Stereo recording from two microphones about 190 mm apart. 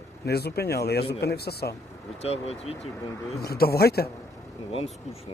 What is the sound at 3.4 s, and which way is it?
Speech, 55° left (ahead or behind).